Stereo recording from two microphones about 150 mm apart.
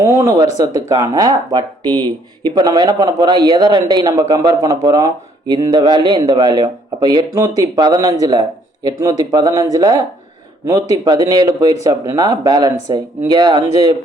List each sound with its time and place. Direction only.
0.0 s speech: 20° right (ahead or behind)